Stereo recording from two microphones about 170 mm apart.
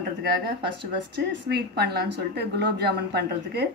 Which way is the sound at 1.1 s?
80° right.